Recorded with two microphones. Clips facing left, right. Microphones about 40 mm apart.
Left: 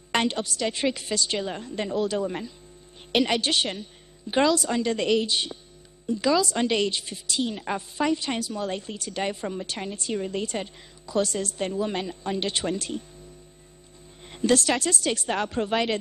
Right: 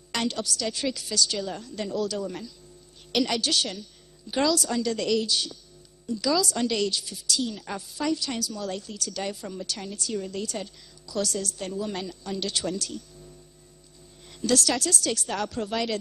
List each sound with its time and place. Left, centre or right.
0.1 s a woman's voice: left
14.2 s a woman's voice: left